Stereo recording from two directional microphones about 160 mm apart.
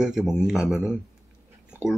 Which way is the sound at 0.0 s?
5° right (ahead or behind).